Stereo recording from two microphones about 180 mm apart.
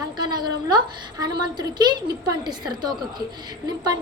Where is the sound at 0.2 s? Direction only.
25° right (ahead or behind).